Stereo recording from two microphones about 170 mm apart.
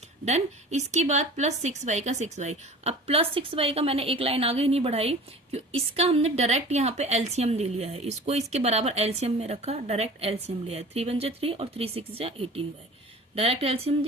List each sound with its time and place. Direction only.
0.3 s a woman's voice: 40° right (ahead or behind)